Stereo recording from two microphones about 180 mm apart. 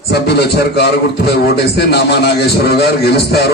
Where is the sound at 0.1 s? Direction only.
65° left (ahead or behind).